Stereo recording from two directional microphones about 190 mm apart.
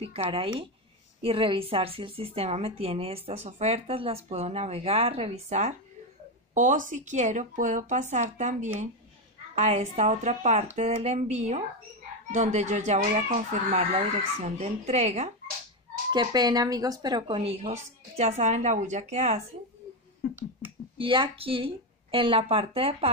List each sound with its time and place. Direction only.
0.0 s a woman's voice: 30° right (ahead or behind)
16.1 s a woman's voice: 20° right (ahead or behind)
21.0 s a woman's voice: 25° right (ahead or behind)